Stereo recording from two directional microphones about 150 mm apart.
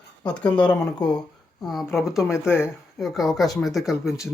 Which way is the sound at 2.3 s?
15° left (ahead or behind).